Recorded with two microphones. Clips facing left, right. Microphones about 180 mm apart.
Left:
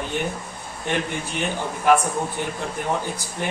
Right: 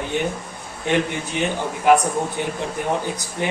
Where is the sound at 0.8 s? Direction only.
15° right (ahead or behind).